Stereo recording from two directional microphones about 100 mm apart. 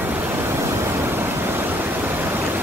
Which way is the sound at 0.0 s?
20° right (ahead or behind).